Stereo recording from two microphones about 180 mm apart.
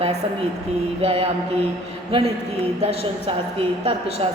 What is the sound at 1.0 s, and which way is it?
Speech, 30° right (ahead or behind).